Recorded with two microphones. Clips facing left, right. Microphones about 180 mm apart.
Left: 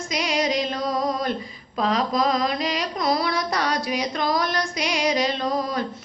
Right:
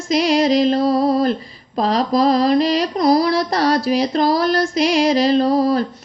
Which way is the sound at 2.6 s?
35° right (ahead or behind).